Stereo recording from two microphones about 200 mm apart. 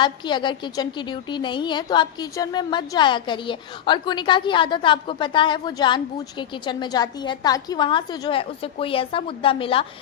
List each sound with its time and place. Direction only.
0.0 s a woman's voice: 25° left (ahead or behind)